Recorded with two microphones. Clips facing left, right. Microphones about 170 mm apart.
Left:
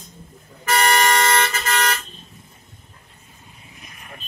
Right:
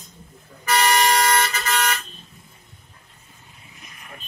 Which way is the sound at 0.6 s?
50° left (ahead or behind).